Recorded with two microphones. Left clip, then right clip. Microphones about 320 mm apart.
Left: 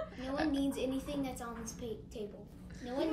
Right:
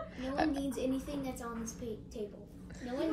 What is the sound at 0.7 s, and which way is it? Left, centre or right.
A woman's voice, centre.